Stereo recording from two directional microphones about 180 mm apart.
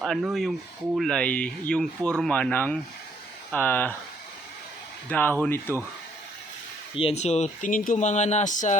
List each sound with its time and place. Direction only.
0.0 s speech: centre (ahead or behind)
5.0 s speech: 10° left (ahead or behind)
6.9 s speech: 35° left (ahead or behind)